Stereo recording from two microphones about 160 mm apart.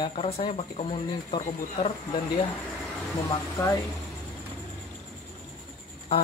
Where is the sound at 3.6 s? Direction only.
20° left (ahead or behind).